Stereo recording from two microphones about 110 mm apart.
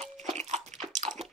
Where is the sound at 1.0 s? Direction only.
90° right.